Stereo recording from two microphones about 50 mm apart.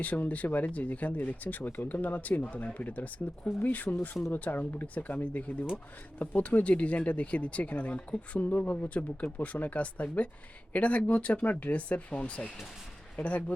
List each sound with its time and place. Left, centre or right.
0.0 s speech: left